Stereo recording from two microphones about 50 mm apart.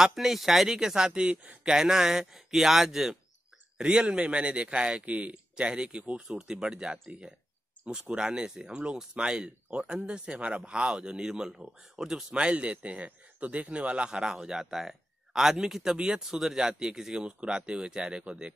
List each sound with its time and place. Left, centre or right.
0.0 s speech: centre
1.2 s speech: right; by 3.2 s centre
3.7 s speech: centre
6.2 s speech: centre
12.4 s speech: right